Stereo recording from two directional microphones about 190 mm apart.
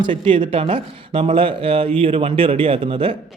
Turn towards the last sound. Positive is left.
turn(degrees=-30)  # may be behind; listen again after turning